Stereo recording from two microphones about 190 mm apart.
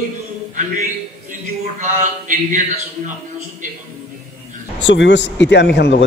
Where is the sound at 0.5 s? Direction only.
40° right (ahead or behind).